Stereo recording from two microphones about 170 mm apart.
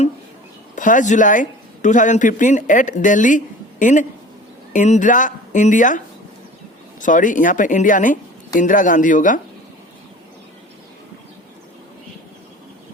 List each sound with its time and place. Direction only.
0.8 s speech: 50° left (ahead or behind)
7.0 s speech: 50° left (ahead or behind)